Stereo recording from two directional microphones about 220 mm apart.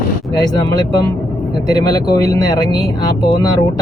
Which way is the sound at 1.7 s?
15° left (ahead or behind).